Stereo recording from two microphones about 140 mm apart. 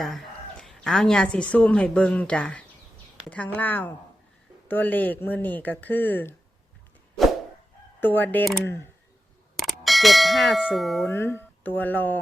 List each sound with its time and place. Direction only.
0.0 s a woman's voice: centre (ahead or behind)
8.0 s speech: 15° left (ahead or behind)
9.6 s clang: centre (ahead or behind)
11.1 s speech: 15° left (ahead or behind)